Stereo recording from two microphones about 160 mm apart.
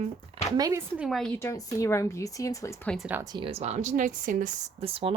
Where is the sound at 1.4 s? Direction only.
20° left (ahead or behind).